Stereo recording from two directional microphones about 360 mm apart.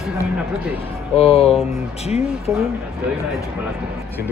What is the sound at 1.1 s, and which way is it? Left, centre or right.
Speech, centre.